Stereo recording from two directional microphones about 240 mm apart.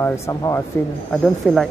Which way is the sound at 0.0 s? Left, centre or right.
Centre.